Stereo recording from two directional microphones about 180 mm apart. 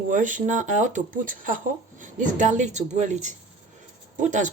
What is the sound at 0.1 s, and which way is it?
Speech, 45° right (ahead or behind).